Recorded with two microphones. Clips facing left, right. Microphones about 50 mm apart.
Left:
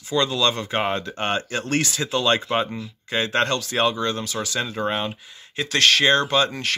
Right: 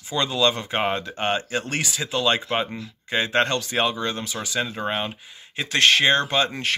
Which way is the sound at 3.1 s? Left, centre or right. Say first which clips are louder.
Even; centre.